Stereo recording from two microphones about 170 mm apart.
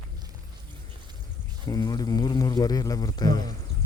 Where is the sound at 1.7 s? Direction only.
20° left (ahead or behind).